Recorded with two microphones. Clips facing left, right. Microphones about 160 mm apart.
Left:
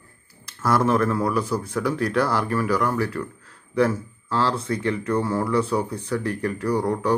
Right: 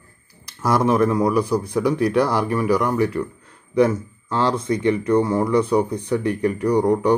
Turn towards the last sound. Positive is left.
turn(degrees=-15)  # may be behind; listen again after turning